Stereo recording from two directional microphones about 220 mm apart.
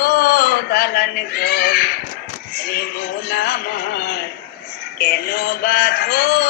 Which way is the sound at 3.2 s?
45° left (ahead or behind).